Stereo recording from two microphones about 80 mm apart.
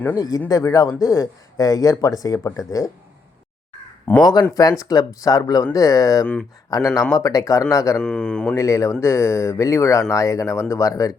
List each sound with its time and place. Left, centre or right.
0.2 s a man's voice: left
4.2 s a man's voice: left
8.0 s speech: centre
8.5 s speech: left